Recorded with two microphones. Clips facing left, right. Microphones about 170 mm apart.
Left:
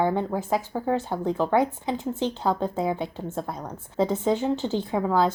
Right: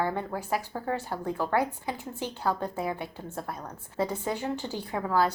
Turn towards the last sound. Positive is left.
turn(degrees=20)  # may be behind; listen again after turning